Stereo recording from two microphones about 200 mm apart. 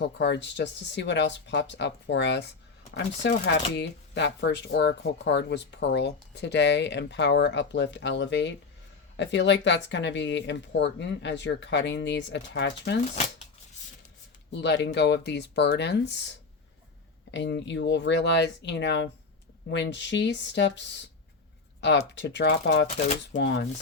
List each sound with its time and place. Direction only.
0.0 s speech: 60° left (ahead or behind)
14.5 s speech: 60° left (ahead or behind)
17.3 s speech: 65° left (ahead or behind)